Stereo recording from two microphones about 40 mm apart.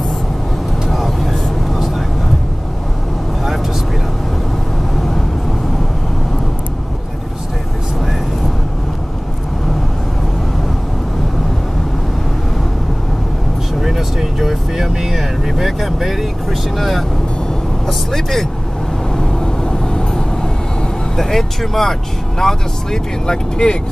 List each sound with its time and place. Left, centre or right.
0.8 s vehicle: centre
13.7 s vehicle: centre
19.1 s vehicle: centre